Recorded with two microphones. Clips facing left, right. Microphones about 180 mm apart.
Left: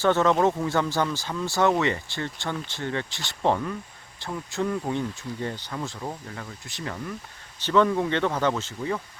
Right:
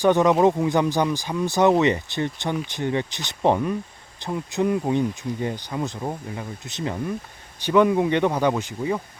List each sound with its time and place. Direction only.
0.0 s speech: 15° right (ahead or behind)